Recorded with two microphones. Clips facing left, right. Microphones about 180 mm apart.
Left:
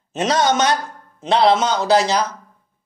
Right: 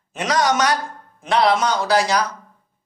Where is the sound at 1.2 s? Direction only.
25° left (ahead or behind).